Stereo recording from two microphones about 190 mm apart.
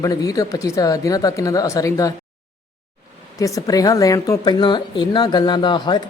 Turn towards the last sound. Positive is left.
turn(degrees=25)  # may be behind; listen again after turning